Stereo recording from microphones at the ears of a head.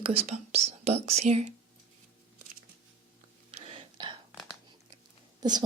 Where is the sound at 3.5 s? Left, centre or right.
Right.